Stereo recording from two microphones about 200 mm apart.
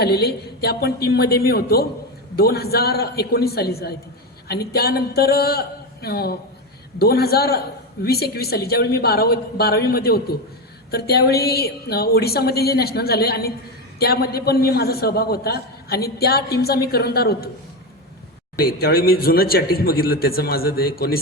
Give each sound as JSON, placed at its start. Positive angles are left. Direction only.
{"t": 0.0, "sound": "a man's voice", "side_deg": 55}
{"t": 18.6, "sound": "a man's voice", "side_deg": 50}